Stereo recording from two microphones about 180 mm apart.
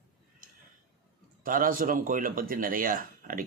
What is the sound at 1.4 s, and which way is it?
Speech, 50° right (ahead or behind).